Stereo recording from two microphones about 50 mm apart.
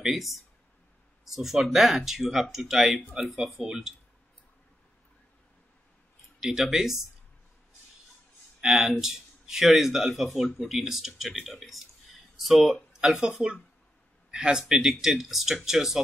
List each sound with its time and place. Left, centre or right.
0.0 s speech: centre
6.4 s speech: centre
8.5 s speech: centre
13.2 s speech: centre